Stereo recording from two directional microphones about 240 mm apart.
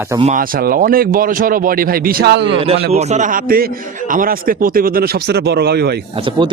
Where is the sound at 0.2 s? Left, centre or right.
Right.